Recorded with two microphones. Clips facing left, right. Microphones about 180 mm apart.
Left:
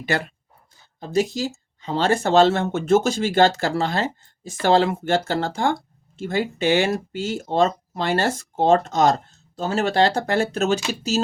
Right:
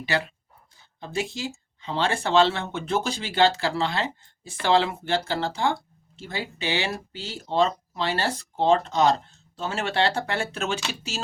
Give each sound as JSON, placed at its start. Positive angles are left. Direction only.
{"t": 0.0, "sound": "speech", "side_deg": 45}